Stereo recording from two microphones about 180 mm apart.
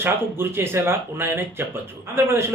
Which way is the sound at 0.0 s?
15° right (ahead or behind).